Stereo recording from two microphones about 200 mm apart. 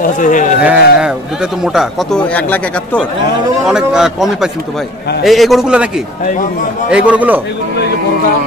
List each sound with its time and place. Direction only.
0.0 s speech: 40° left (ahead or behind)
0.6 s a man's voice: 5° right (ahead or behind)